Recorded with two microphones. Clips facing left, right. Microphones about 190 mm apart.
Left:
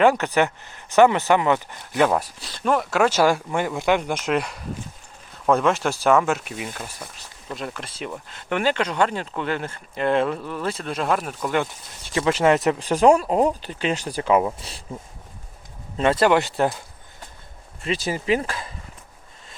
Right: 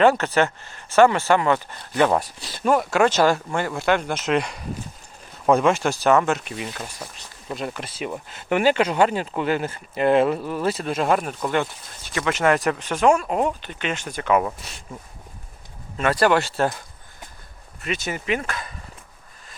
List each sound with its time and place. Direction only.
0.0 s speech: 15° left (ahead or behind)
2.0 s speech: centre (ahead or behind)
12.0 s speech: 30° left (ahead or behind)
12.8 s speech: 35° left (ahead or behind)
16.0 s speech: 25° left (ahead or behind)
17.8 s speech: 30° left (ahead or behind)